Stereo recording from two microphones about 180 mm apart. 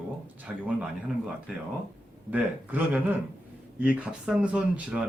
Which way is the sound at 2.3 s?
10° right (ahead or behind).